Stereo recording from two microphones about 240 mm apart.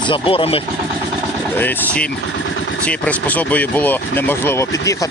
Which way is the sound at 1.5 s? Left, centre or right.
Centre.